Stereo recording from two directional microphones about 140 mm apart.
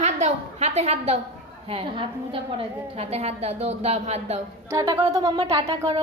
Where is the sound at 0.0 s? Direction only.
50° right (ahead or behind).